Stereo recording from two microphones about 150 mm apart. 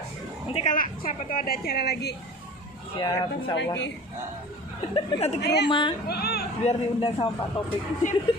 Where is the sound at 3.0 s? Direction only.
30° left (ahead or behind).